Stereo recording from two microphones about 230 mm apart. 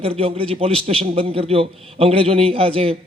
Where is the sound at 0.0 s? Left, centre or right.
Right.